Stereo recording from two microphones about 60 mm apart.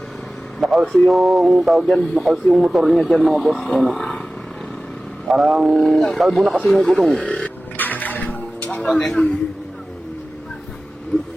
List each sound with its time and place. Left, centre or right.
0.6 s speech: centre
5.3 s speech: centre
7.2 s music: centre
7.8 s music: left
8.8 s a man's voice: centre